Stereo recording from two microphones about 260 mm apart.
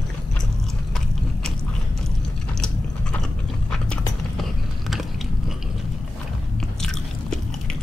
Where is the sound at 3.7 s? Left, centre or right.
Centre.